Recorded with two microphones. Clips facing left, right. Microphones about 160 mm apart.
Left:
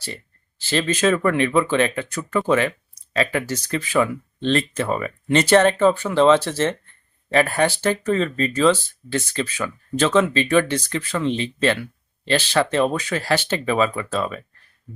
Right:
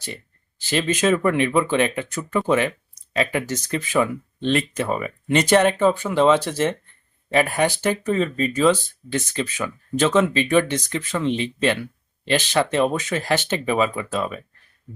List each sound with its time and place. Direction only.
0.7 s speech: 15° right (ahead or behind)